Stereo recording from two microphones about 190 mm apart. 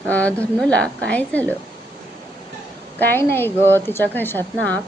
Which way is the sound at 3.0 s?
10° left (ahead or behind).